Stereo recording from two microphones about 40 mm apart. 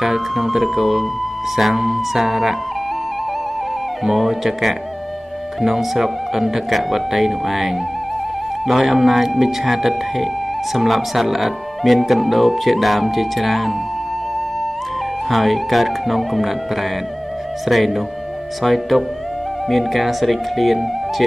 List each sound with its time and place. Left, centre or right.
0.0 s speech: centre
4.0 s speech: centre
8.8 s speech: centre
15.2 s speech: centre
17.6 s speech: centre